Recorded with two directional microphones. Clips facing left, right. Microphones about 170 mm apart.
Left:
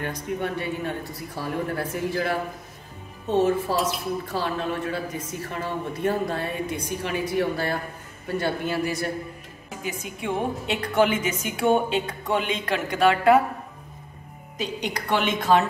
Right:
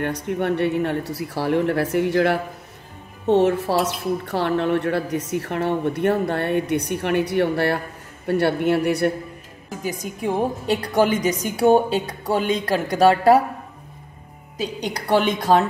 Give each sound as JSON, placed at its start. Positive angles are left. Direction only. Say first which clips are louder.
{"t": 0.0, "sound": "a woman's voice", "louder": "right 5 dB", "side_deg": -65}
{"t": 9.8, "sound": "a woman's voice", "louder": "right 5 dB", "side_deg": -40}
{"t": 15.0, "sound": "a woman's voice", "louder": "right 6 dB", "side_deg": -40}